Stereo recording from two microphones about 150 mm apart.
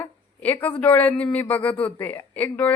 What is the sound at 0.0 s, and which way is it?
A woman's voice, 10° left (ahead or behind).